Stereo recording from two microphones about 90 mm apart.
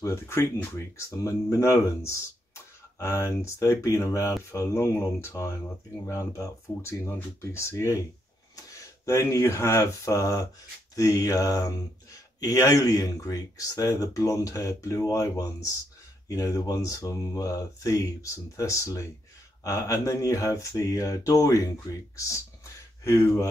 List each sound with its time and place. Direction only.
0.0 s speech: 30° left (ahead or behind)